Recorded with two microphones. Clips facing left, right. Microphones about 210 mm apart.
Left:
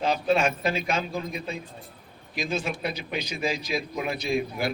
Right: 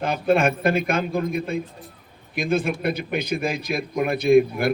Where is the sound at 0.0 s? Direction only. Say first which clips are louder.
Right 4 dB; 55° right (ahead or behind).